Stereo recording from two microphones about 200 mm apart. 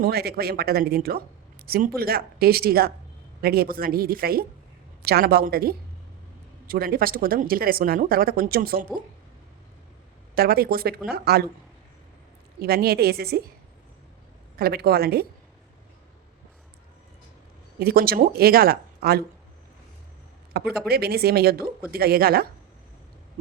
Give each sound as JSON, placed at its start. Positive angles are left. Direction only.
{"t": 0.0, "sound": "speech", "side_deg": -50}
{"t": 10.3, "sound": "speech", "side_deg": -50}
{"t": 12.6, "sound": "speech", "side_deg": -50}
{"t": 14.5, "sound": "speech", "side_deg": -50}
{"t": 17.7, "sound": "speech", "side_deg": -50}
{"t": 20.5, "sound": "speech", "side_deg": -50}